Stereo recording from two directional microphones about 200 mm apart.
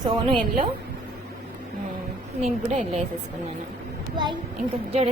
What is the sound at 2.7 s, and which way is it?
Speech, 35° right (ahead or behind).